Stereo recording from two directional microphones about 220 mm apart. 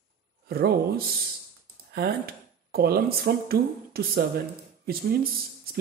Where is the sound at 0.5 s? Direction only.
45° right (ahead or behind).